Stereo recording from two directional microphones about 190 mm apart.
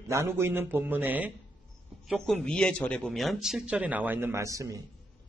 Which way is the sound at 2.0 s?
Centre (ahead or behind).